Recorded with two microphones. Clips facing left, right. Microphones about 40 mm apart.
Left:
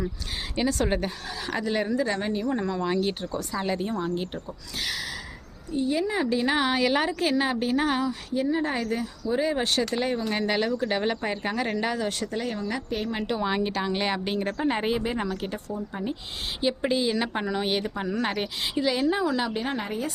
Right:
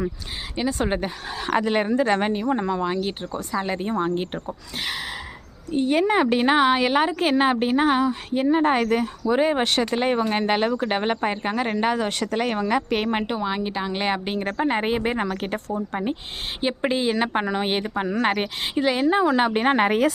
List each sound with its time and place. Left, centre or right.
0.7 s speech: right
1.5 s speech: right
2.4 s speech: right
2.9 s speech: centre
3.6 s speech: right
5.7 s speech: right
6.6 s speech: right
7.2 s speech: right
8.3 s speech: right
12.2 s speech: right
13.4 s speech: centre; by 15.0 s right
15.0 s speech: right